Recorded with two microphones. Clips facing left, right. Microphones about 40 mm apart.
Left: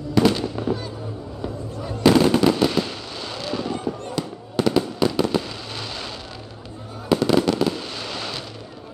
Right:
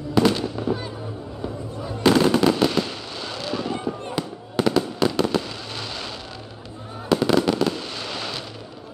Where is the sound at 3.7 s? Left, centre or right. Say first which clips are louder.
Even; right.